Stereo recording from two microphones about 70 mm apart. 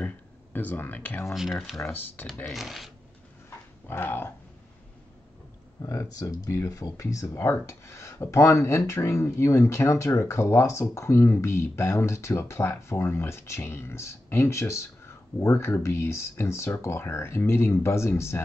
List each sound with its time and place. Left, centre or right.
0.0 s speech: left
1.3 s speech: centre
1.9 s speech: left
2.5 s speech: centre
3.4 s dog: left
5.8 s speech: left